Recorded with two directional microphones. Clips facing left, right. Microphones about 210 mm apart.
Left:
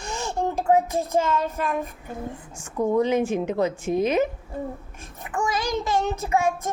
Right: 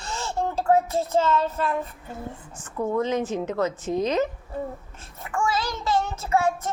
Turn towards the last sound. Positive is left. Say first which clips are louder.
# even
turn(degrees=15)  # may be behind; listen again after turning